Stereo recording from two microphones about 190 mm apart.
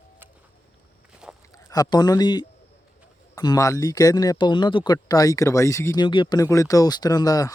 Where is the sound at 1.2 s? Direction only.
5° right (ahead or behind).